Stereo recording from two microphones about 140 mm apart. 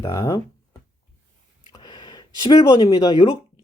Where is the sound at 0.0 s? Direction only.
25° left (ahead or behind).